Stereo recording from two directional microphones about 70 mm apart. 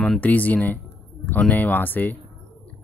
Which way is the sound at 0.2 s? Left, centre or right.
Left.